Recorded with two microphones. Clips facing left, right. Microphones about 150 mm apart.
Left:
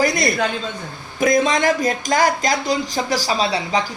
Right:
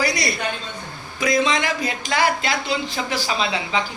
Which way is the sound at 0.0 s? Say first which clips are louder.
Left 5 dB; 50° left (ahead or behind).